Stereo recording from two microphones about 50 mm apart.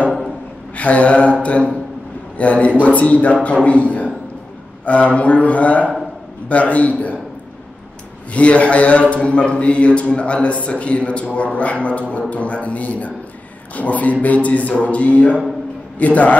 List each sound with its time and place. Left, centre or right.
0.7 s speech: left
8.3 s a man's voice: left